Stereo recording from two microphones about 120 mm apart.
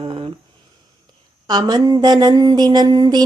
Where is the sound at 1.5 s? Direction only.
35° right (ahead or behind).